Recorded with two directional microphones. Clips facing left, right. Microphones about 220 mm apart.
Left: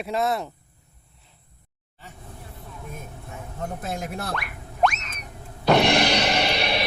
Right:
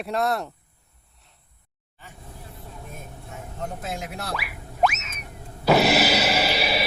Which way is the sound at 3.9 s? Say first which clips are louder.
Left 2 dB; 50° left (ahead or behind).